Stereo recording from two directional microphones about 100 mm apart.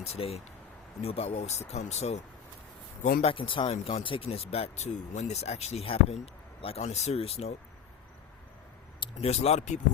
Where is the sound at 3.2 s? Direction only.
60° left (ahead or behind); by 7.5 s 90° left.